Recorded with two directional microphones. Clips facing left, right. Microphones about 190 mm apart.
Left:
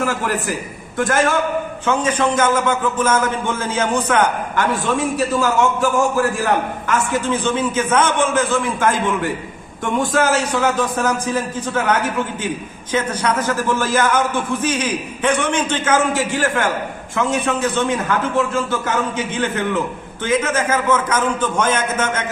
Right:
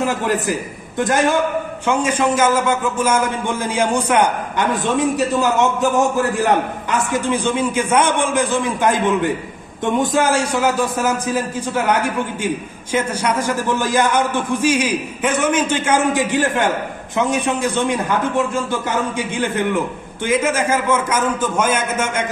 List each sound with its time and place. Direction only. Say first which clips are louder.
0.0 s a man's voice: right 2 dB; 20° right (ahead or behind)